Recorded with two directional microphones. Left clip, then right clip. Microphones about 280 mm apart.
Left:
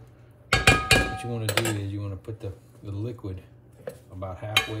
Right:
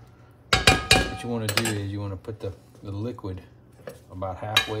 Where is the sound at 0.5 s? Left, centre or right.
Centre.